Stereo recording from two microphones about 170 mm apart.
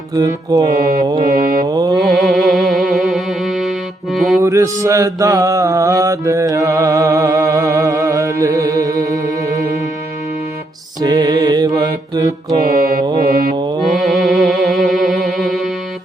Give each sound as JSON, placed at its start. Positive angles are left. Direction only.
{"t": 0.1, "sound": "music", "side_deg": -20}
{"t": 1.2, "sound": "mantra", "side_deg": -60}
{"t": 1.7, "sound": "mantra", "side_deg": -25}
{"t": 2.1, "sound": "music", "side_deg": 0}
{"t": 4.4, "sound": "mantra", "side_deg": -20}
{"t": 11.0, "sound": "music", "side_deg": -25}
{"t": 12.1, "sound": "mantra", "side_deg": -20}
{"t": 12.6, "sound": "mantra", "side_deg": -55}
{"t": 13.6, "sound": "mantra", "side_deg": -25}
{"t": 14.0, "sound": "music", "side_deg": 0}